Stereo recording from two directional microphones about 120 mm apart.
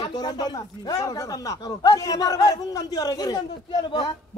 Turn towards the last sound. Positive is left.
turn(degrees=40)  # may be behind; listen again after turning